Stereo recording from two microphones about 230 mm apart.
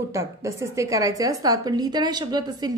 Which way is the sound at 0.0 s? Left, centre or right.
Centre.